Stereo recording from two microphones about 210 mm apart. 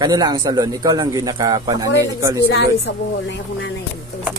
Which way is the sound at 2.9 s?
60° left (ahead or behind).